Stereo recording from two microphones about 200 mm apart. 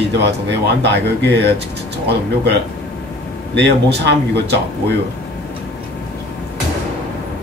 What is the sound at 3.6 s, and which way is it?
Speech, 55° right (ahead or behind).